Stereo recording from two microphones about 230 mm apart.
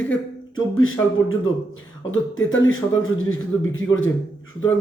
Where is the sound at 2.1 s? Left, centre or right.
Left.